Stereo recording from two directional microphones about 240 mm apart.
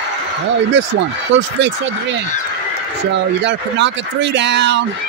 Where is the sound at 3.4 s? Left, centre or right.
Right.